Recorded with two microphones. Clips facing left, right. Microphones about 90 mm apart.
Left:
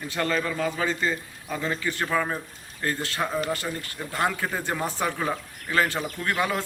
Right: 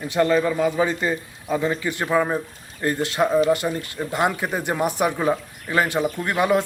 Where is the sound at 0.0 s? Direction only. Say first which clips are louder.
Right 8 dB; 15° right (ahead or behind).